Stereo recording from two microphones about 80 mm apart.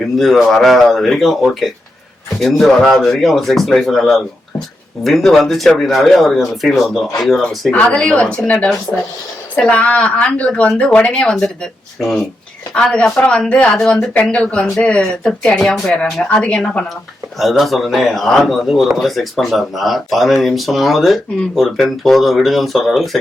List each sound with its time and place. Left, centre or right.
0.2 s a man's voice: centre
7.7 s a man's voice: centre
16.4 s speech: centre
17.3 s a man's voice: centre